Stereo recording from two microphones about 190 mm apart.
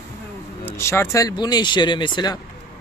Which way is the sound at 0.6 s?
15° left (ahead or behind).